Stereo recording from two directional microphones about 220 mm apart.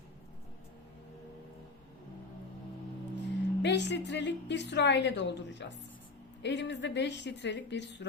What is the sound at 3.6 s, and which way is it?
A woman's voice, 50° left (ahead or behind).